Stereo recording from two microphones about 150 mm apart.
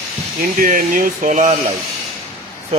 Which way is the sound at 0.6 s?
65° right (ahead or behind).